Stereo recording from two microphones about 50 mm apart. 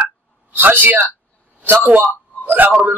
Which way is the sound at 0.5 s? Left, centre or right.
Right.